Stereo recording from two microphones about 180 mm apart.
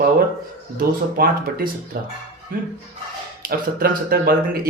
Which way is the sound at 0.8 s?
55° right (ahead or behind).